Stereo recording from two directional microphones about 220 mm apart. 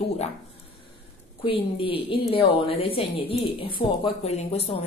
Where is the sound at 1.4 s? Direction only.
25° left (ahead or behind).